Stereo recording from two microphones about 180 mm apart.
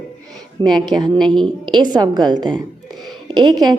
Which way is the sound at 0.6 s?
25° right (ahead or behind).